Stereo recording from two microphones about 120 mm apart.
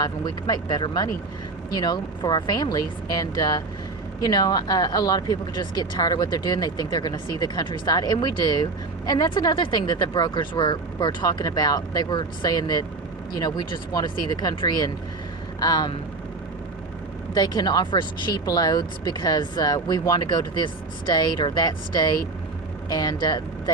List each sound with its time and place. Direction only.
0.0 s speech: 35° left (ahead or behind)
17.3 s speech: 35° left (ahead or behind)